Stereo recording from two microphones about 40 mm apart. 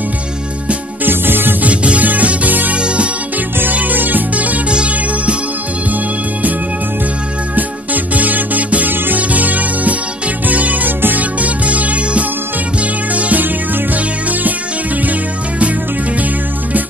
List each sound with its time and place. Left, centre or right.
1.0 s music: right
1.6 s music: right
2.0 s music: right
2.7 s music: right
3.7 s music: right
4.6 s music: right
7.5 s music: right
8.9 s music: right
9.3 s music: right